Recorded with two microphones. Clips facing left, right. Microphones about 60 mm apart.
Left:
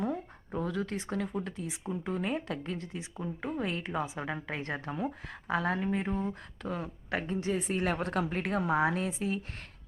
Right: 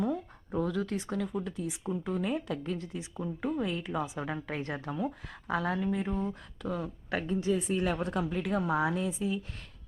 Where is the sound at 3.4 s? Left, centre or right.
Left.